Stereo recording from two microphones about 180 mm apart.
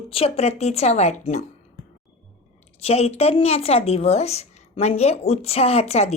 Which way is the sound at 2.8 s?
35° left (ahead or behind).